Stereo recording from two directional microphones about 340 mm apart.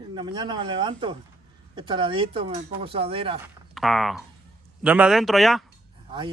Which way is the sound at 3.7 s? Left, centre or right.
Centre.